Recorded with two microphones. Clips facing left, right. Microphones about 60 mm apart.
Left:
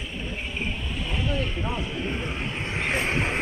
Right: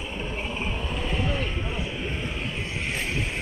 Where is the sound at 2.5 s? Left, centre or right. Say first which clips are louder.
Left 3 dB; left.